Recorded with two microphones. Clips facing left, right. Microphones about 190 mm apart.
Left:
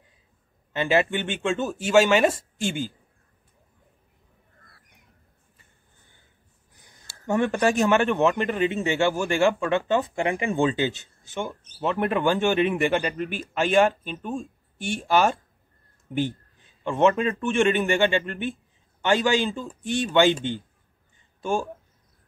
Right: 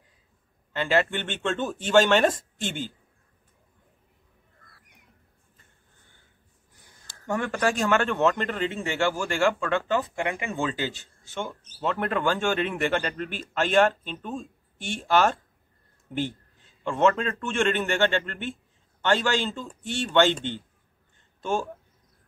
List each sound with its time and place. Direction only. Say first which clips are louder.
0.7 s a man's voice: left 2 dB; 15° left (ahead or behind)
7.2 s a man's voice: left 4 dB; 25° left (ahead or behind)
16.8 s a man's voice: left 2 dB; 15° left (ahead or behind)